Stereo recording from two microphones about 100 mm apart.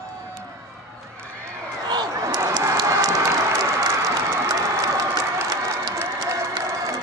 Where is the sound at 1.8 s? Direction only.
40° right (ahead or behind).